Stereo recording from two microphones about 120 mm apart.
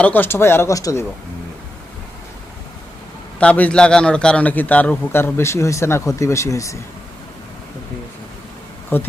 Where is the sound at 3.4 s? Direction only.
10° left (ahead or behind); by 6.8 s 25° left (ahead or behind).